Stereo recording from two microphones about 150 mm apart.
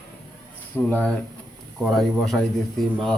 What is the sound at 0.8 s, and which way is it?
Speech, 5° left (ahead or behind).